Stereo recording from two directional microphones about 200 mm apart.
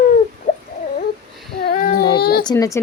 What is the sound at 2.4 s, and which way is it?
Speech, 15° left (ahead or behind).